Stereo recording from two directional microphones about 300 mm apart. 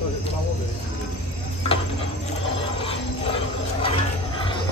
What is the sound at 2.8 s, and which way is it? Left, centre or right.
Wild animals, centre.